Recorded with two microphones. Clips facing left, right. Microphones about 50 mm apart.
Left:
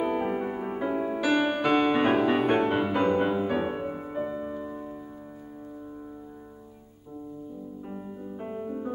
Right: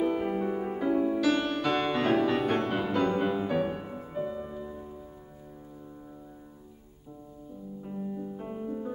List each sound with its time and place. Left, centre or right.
0.0 s music: centre
7.8 s music: left